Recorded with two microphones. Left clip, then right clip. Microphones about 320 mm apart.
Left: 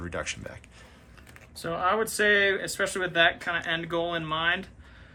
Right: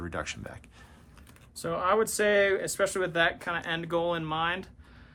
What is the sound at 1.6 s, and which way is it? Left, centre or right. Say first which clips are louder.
Speech: even; right.